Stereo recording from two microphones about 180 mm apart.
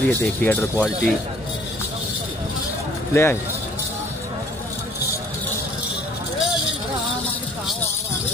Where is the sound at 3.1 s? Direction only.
10° left (ahead or behind).